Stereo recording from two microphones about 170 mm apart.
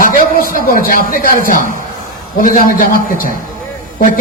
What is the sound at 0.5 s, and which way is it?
A man's voice, 55° left (ahead or behind).